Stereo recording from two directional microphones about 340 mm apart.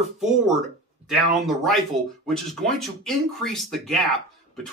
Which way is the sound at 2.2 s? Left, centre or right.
Centre.